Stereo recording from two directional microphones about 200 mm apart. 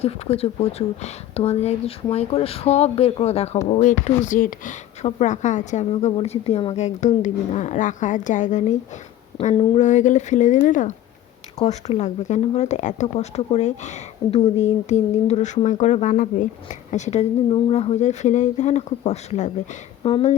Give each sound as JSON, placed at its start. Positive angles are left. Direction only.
{"t": 0.0, "sound": "speech", "side_deg": 30}